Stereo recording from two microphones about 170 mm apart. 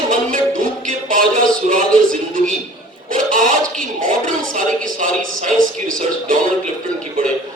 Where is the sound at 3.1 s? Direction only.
50° right (ahead or behind).